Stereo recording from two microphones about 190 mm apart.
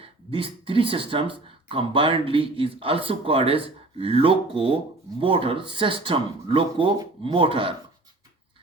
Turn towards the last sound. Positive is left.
turn(degrees=-25)  # may be behind; listen again after turning